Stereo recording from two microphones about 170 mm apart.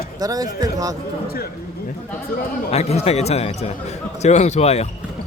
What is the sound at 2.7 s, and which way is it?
Speech, 40° left (ahead or behind).